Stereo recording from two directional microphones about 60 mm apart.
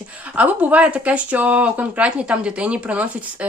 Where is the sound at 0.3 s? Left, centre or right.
Right.